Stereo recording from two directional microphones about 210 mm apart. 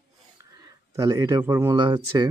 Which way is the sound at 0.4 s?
15° right (ahead or behind).